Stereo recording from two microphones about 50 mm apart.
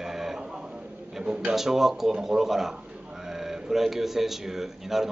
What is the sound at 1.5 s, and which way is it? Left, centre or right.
A man's voice, centre.